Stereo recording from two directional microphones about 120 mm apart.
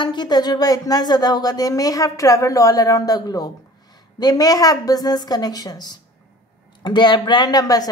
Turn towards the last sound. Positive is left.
turn(degrees=30)  # may be behind; listen again after turning